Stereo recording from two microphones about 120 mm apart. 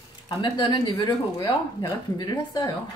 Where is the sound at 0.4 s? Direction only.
40° left (ahead or behind).